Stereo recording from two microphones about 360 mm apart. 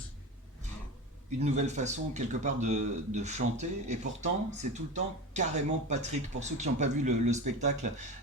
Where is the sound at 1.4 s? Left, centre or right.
Centre.